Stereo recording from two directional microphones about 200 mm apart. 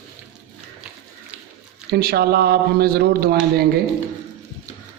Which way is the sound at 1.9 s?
50° right (ahead or behind).